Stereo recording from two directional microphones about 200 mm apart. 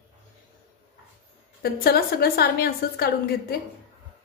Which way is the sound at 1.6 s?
50° left (ahead or behind).